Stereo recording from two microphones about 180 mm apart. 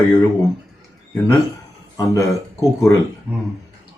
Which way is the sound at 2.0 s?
15° left (ahead or behind).